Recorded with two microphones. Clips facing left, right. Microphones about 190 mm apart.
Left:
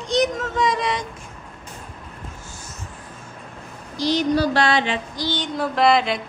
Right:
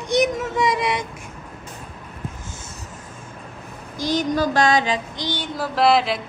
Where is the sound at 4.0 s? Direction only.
50° right (ahead or behind).